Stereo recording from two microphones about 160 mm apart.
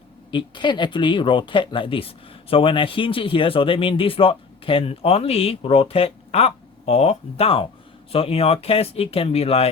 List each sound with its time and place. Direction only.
0.3 s speech: 30° left (ahead or behind)